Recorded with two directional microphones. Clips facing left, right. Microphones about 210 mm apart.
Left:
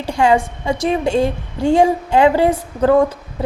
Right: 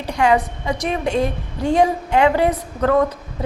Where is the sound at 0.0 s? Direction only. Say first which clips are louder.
Left 2 dB; 30° left (ahead or behind).